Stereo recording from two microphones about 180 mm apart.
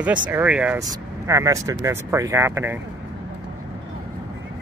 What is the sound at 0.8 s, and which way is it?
Speech, 20° right (ahead or behind).